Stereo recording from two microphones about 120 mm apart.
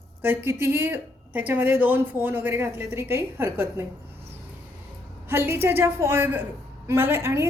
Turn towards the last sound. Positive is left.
turn(degrees=-20)  # may be behind; listen again after turning